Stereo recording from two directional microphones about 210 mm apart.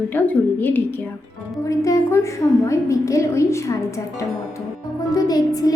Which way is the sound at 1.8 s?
15° left (ahead or behind).